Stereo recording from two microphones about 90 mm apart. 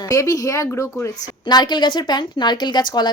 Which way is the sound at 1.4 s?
55° left (ahead or behind).